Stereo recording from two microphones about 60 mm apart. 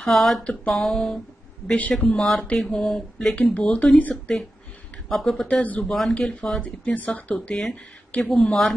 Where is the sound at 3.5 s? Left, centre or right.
Left.